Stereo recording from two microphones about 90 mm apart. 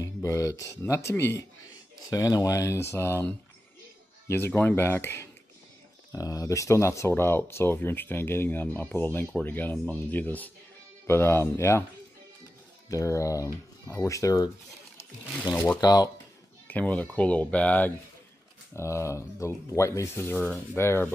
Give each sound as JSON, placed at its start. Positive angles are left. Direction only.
{"t": 0.0, "sound": "speech", "side_deg": 35}
{"t": 2.0, "sound": "speech", "side_deg": 40}
{"t": 4.3, "sound": "speech", "side_deg": 20}
{"t": 6.1, "sound": "speech", "side_deg": 40}
{"t": 12.9, "sound": "speech", "side_deg": 35}
{"t": 15.5, "sound": "speech", "side_deg": 20}
{"t": 15.8, "sound": "speech", "side_deg": 45}
{"t": 16.6, "sound": "speech", "side_deg": 15}
{"t": 18.8, "sound": "speech", "side_deg": 30}